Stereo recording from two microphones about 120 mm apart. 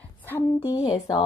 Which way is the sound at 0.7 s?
30° left (ahead or behind).